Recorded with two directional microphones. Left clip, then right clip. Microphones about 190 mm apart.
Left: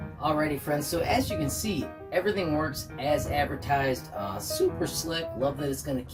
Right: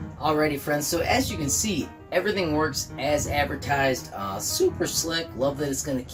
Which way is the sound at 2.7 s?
5° right (ahead or behind).